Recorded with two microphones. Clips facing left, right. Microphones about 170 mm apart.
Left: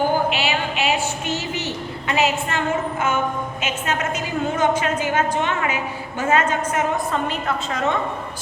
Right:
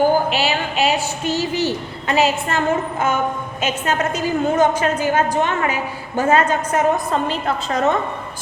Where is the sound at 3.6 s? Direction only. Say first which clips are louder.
Right 5 dB; 35° right (ahead or behind).